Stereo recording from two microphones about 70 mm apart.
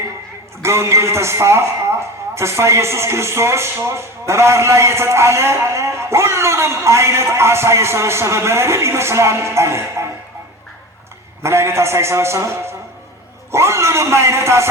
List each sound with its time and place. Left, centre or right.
0.6 s a man's voice: right
11.4 s a man's voice: right